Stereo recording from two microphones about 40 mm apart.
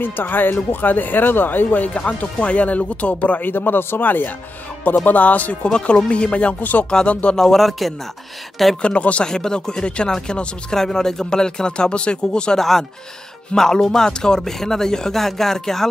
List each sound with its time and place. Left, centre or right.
0.0 s speech: left
2.0 s speech: left
3.3 s speech: left
5.7 s speech: left
6.6 s speech: left
6.9 s speech: left
7.3 s speech: centre
8.8 s speech: left
9.2 s speech: centre
10.7 s speech: centre
12.5 s speech: centre